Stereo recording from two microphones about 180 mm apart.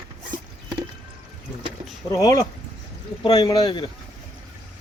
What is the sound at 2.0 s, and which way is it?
Speech, 20° left (ahead or behind).